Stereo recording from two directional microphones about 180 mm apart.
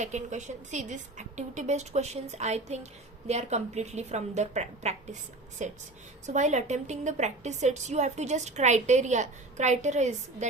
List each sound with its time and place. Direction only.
0.0 s a woman's voice: 40° right (ahead or behind)